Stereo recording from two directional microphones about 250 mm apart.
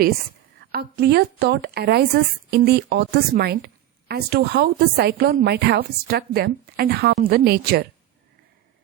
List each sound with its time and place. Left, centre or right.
0.7 s a woman's voice: right